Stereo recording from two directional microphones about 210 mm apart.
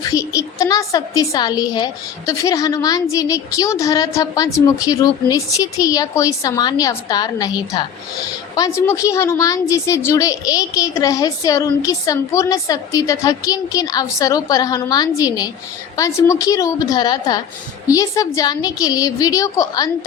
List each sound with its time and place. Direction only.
0.1 s a woman's voice: 15° left (ahead or behind)